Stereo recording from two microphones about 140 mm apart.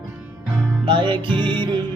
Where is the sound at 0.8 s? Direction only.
35° right (ahead or behind).